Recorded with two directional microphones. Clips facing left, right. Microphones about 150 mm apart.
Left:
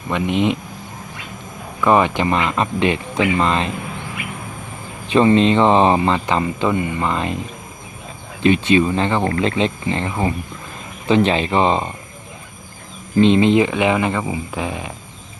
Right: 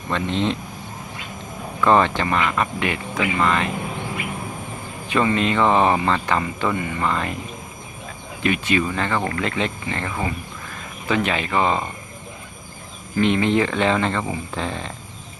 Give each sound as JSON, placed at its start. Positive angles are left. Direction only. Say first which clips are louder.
{"t": 0.1, "sound": "speech", "louder": "left 4 dB", "side_deg": 15}
{"t": 1.8, "sound": "speech", "louder": "left 2 dB", "side_deg": 15}
{"t": 5.0, "sound": "speech", "louder": "left 7 dB", "side_deg": 25}
{"t": 8.4, "sound": "speech", "louder": "left 6 dB", "side_deg": 25}
{"t": 13.1, "sound": "speech", "louder": "left 6 dB", "side_deg": 20}